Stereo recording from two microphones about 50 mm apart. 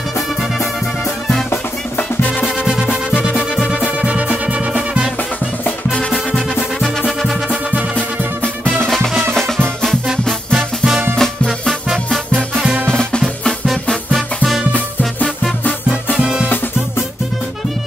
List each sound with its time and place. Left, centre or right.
2.0 s music: left
2.6 s music: centre
5.9 s music: left
6.8 s music: centre
8.7 s music: centre
11.1 s music: centre
12.8 s music: centre
14.1 s music: centre
16.2 s music: centre